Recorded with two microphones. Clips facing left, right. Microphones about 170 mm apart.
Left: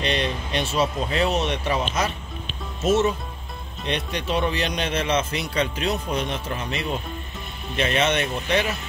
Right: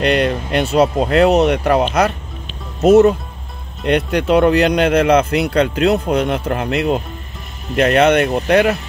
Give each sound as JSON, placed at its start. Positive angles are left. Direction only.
{"t": 0.0, "sound": "speech", "side_deg": -65}